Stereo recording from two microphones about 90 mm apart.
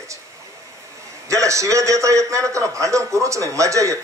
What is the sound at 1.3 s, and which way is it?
A man's voice, 35° right (ahead or behind).